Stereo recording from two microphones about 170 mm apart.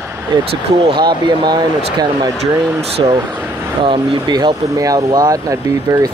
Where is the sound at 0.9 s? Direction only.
25° right (ahead or behind).